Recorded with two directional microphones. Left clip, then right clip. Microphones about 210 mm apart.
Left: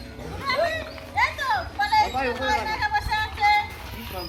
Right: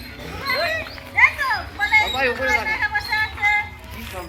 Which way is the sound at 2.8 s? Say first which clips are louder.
Right 3 dB; 45° left (ahead or behind).